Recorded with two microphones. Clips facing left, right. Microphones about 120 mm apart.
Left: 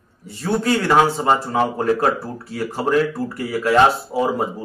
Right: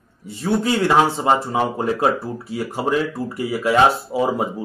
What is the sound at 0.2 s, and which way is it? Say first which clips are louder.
Speech: right 1 dB; 15° right (ahead or behind).